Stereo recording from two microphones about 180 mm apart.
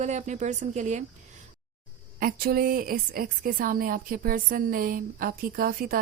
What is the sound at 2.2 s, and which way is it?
A woman's voice, 55° right (ahead or behind).